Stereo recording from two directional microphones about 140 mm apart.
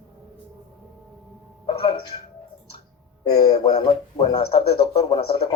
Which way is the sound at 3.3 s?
30° left (ahead or behind).